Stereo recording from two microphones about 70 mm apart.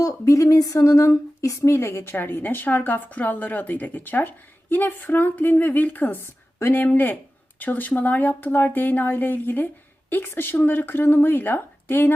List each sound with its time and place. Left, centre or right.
0.0 s speech: left